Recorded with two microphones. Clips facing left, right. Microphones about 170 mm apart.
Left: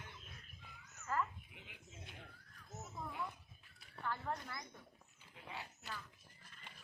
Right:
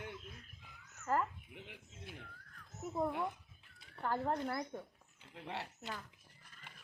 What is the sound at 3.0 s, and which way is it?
Speech, 60° right (ahead or behind).